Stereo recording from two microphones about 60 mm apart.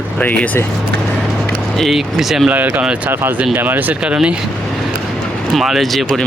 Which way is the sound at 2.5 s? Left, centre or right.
Right.